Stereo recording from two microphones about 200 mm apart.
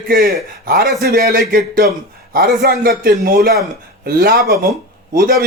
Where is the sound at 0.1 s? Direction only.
45° right (ahead or behind).